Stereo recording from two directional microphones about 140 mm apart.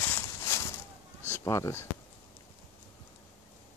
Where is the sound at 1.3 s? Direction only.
20° left (ahead or behind).